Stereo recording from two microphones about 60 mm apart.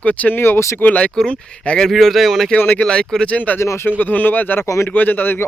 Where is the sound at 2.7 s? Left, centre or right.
Centre.